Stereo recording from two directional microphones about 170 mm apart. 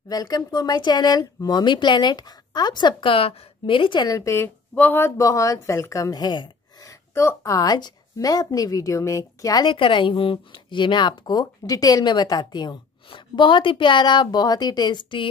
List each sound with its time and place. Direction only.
0.1 s speech: 20° left (ahead or behind)